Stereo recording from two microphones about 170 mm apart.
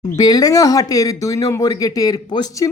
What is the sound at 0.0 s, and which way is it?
Speech, 20° left (ahead or behind).